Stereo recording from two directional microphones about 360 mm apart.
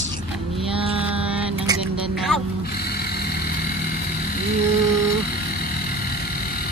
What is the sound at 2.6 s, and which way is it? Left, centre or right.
Vehicle, left.